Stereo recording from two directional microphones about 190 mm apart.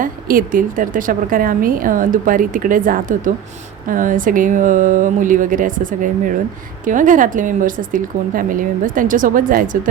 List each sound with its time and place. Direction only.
0.0 s a woman's voice: 45° right (ahead or behind)